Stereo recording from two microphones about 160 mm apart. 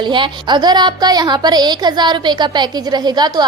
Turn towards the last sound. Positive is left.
turn(degrees=-25)  # may be behind; listen again after turning